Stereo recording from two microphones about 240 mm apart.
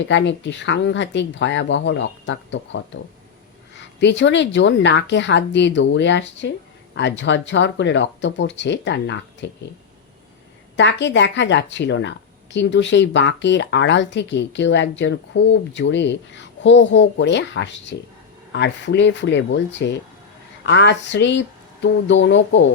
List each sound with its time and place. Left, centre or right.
0.1 s a woman's voice: left
10.8 s a woman's voice: left